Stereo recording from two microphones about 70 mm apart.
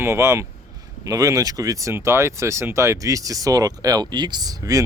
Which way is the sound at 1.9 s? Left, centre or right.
Right.